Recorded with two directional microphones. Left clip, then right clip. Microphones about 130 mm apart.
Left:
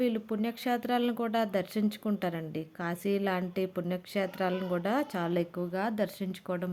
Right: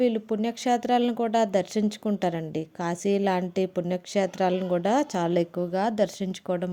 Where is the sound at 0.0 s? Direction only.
30° right (ahead or behind).